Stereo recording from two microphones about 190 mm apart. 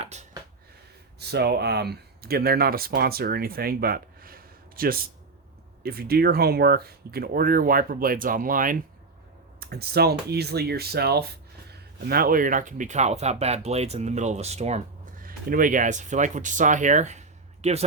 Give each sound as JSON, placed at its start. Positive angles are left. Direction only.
{"t": 0.0, "sound": "a sound", "side_deg": -35}
{"t": 1.2, "sound": "speech", "side_deg": -60}
{"t": 9.6, "sound": "speech", "side_deg": -55}
{"t": 15.2, "sound": "speech", "side_deg": -45}